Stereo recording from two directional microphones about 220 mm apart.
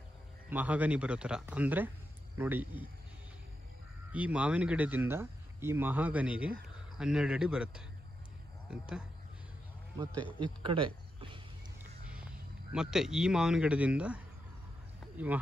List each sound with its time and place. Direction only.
0.5 s speech: 5° right (ahead or behind)
4.1 s speech: 5° right (ahead or behind)
10.4 s speech: 25° right (ahead or behind)
12.7 s speech: 5° right (ahead or behind)